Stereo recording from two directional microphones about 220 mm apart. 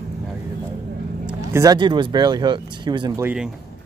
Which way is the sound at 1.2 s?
15° right (ahead or behind).